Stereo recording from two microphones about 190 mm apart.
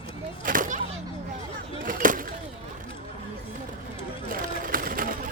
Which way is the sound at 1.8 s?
45° right (ahead or behind).